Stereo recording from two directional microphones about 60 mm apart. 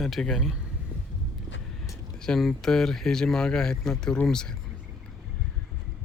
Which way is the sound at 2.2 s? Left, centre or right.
Centre.